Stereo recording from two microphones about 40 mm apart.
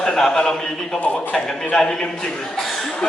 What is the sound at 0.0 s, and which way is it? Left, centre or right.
Speech, centre.